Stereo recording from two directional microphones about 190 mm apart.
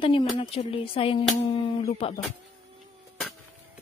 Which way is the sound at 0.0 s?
30° left (ahead or behind).